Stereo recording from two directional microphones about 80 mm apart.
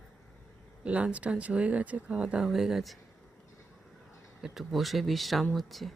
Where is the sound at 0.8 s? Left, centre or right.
Centre.